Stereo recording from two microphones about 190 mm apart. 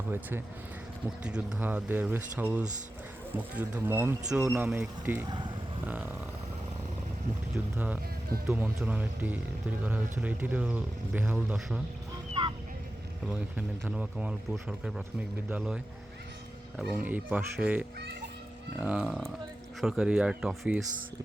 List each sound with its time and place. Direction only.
0.1 s speech: 10° right (ahead or behind)
7.5 s speech: 10° right (ahead or behind)
12.3 s a sound: 25° right (ahead or behind)
13.2 s speech: 5° right (ahead or behind)